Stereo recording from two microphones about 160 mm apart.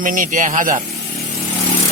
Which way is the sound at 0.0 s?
55° right (ahead or behind).